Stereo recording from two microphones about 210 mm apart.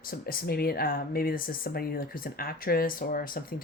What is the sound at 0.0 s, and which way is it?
Speech, 45° left (ahead or behind).